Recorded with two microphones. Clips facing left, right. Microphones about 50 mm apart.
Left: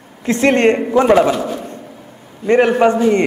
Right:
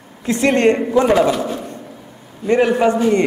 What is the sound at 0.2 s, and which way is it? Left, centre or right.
A man's voice, left.